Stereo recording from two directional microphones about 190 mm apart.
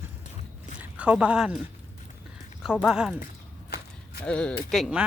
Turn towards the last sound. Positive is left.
turn(degrees=-5)  # may be behind; listen again after turning